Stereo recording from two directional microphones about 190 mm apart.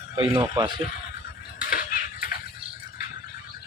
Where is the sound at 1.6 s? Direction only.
45° left (ahead or behind).